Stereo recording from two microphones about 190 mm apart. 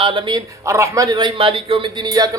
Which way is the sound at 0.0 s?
25° right (ahead or behind).